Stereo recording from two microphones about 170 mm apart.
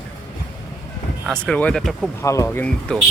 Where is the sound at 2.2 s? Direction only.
20° left (ahead or behind).